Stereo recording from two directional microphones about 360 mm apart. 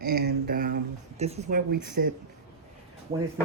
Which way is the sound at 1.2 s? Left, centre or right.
Centre.